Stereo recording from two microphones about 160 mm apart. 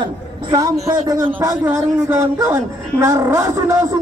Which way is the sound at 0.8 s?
20° right (ahead or behind).